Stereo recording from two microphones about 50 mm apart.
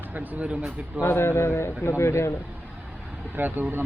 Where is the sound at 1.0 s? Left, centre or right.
Left.